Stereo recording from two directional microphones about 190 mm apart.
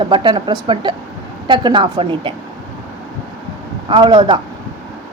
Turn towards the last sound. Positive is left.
turn(degrees=-25)  # may be behind; listen again after turning